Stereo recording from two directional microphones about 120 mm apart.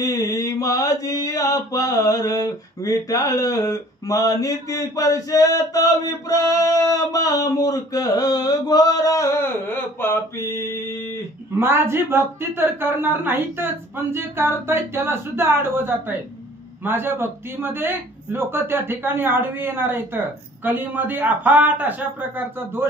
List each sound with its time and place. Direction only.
0.0 s mantra: 30° left (ahead or behind)
11.6 s a man's voice: 20° right (ahead or behind)